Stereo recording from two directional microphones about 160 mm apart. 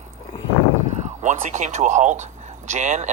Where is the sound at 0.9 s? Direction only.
45° right (ahead or behind).